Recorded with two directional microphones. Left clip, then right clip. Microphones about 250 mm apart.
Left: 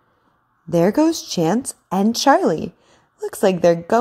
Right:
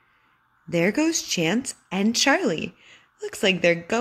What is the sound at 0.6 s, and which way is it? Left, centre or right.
A woman's voice, centre.